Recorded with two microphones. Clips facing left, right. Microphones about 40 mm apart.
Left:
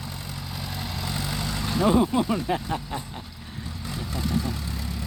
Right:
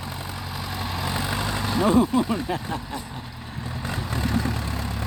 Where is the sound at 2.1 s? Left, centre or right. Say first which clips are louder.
Right 1 dB; centre.